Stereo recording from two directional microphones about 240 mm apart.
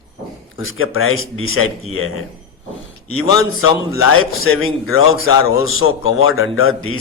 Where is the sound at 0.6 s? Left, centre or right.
Left.